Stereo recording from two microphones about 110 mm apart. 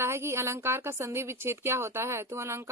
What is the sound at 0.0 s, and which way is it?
A woman's voice, 25° right (ahead or behind).